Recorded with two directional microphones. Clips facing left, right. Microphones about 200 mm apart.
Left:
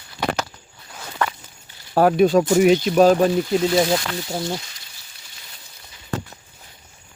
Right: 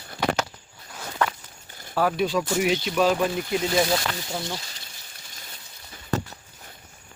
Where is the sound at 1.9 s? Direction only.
50° left (ahead or behind).